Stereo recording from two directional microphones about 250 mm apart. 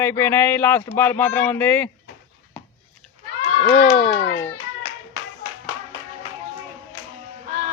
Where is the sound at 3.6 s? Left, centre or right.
Left.